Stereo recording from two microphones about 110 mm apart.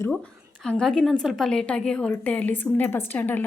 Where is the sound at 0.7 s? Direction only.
10° left (ahead or behind).